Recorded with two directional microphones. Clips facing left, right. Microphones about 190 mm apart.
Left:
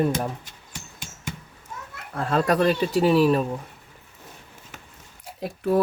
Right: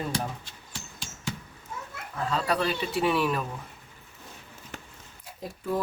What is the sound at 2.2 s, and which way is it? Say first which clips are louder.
Speech: left 6 dB; 55° left (ahead or behind).